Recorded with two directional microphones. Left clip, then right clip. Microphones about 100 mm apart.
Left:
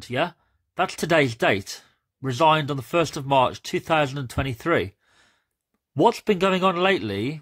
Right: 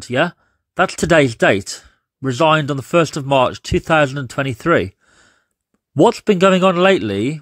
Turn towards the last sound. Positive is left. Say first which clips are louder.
# right 8 dB
turn(degrees=-40)  # may be behind; listen again after turning